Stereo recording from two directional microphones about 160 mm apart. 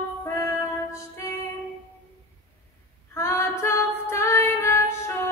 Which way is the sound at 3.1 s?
15° left (ahead or behind).